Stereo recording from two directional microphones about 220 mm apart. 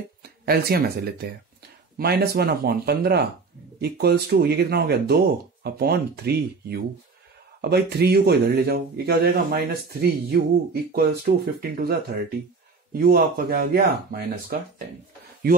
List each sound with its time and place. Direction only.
0.2 s a man's voice: 45° right (ahead or behind)